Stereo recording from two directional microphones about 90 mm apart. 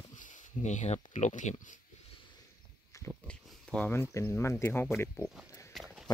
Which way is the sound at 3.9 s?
30° left (ahead or behind).